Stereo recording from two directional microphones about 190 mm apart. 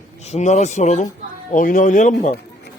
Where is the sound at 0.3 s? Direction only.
35° left (ahead or behind).